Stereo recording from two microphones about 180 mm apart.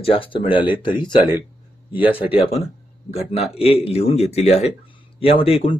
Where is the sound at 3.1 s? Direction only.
35° left (ahead or behind).